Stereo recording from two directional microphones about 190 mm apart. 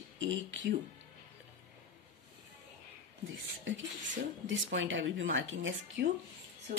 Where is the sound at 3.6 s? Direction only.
90° right.